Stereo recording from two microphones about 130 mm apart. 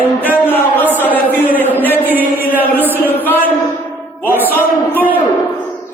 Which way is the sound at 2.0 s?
15° right (ahead or behind).